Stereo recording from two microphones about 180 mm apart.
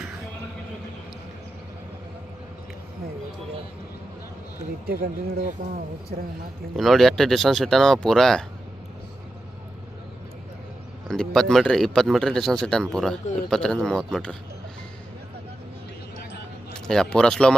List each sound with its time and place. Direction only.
4.9 s speech: 55° right (ahead or behind)
6.7 s speech: centre (ahead or behind)
11.1 s speech: 5° left (ahead or behind)
16.9 s speech: 5° left (ahead or behind)